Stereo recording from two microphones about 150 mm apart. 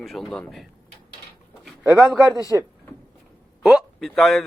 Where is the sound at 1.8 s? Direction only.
15° right (ahead or behind).